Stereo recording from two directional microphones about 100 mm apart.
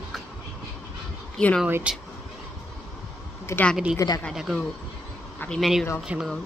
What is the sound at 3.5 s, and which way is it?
Speech, 30° left (ahead or behind).